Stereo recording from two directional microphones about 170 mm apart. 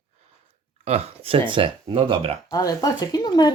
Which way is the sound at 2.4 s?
20° left (ahead or behind).